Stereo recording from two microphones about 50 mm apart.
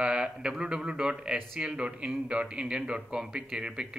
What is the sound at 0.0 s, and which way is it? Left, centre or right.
Speech, centre.